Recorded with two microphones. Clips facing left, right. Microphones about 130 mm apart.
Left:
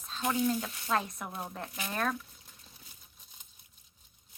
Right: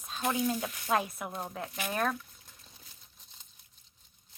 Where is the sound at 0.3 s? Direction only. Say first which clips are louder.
Left 1 dB; 15° right (ahead or behind).